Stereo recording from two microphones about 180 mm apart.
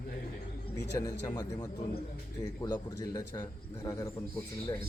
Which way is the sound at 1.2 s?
25° left (ahead or behind).